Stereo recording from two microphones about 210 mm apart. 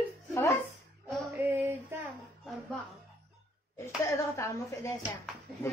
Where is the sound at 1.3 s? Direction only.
10° right (ahead or behind).